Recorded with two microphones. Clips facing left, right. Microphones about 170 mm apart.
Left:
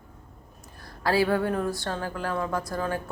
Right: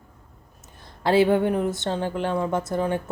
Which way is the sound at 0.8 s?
20° right (ahead or behind).